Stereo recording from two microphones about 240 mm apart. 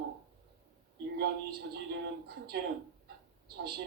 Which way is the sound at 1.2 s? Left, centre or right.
Right.